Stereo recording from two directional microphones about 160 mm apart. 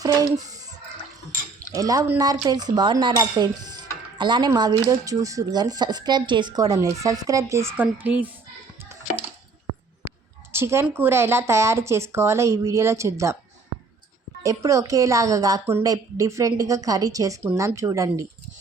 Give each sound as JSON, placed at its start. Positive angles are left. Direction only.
{"t": 0.0, "sound": "a sound", "side_deg": -20}
{"t": 1.7, "sound": "dishes", "side_deg": -20}
{"t": 7.5, "sound": "speech", "side_deg": -15}
{"t": 10.5, "sound": "speech", "side_deg": -15}
{"t": 14.4, "sound": "dishes", "side_deg": -20}